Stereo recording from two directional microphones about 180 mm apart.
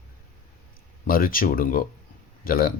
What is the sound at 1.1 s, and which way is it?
Speech, 50° left (ahead or behind).